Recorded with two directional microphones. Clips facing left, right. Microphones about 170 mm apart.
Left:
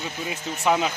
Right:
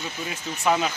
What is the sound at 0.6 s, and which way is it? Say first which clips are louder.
Speech: left 1 dB; 5° left (ahead or behind).